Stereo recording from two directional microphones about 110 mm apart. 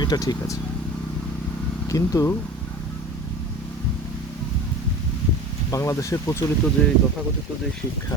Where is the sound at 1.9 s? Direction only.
30° left (ahead or behind).